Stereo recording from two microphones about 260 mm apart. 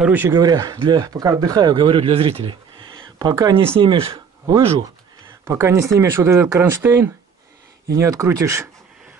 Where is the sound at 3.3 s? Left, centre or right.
Centre.